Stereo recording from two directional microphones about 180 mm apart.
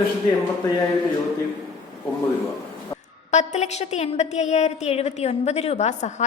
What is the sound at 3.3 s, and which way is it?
A woman's voice, 40° left (ahead or behind).